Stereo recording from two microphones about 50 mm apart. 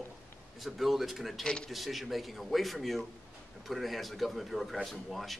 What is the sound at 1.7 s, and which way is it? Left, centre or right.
Speech, centre.